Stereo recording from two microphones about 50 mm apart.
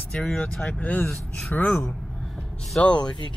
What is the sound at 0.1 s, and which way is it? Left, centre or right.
Speech, left.